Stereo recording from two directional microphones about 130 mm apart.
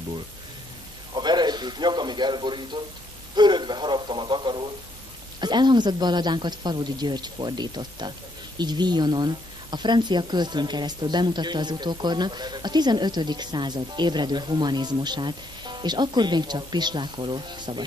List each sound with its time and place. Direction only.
1.1 s speech: 35° right (ahead or behind)